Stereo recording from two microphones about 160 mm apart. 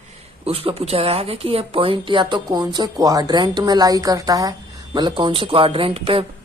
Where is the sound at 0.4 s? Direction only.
35° right (ahead or behind).